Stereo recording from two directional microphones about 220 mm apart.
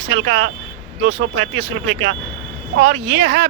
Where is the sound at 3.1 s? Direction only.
50° right (ahead or behind).